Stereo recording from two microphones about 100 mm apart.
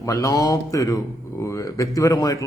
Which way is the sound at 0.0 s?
35° left (ahead or behind).